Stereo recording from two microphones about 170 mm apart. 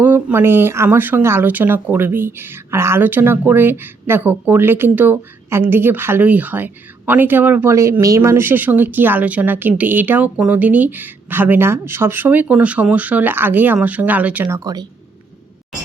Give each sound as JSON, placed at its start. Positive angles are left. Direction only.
{"t": 0.0, "sound": "speech", "side_deg": -10}
{"t": 14.4, "sound": "speech", "side_deg": -20}